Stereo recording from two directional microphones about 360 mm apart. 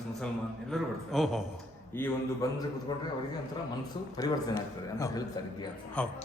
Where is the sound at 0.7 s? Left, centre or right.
Centre.